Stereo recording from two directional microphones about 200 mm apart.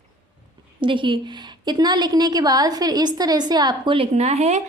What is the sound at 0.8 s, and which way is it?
A woman's voice, 25° right (ahead or behind).